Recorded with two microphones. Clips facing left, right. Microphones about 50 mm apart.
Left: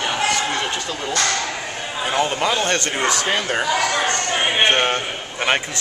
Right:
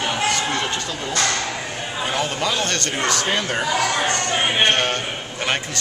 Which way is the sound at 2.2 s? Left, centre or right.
Centre.